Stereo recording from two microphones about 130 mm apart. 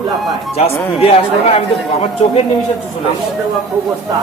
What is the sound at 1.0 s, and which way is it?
Speech, 50° left (ahead or behind).